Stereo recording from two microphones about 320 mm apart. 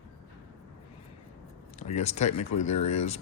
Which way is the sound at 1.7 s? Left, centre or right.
Left.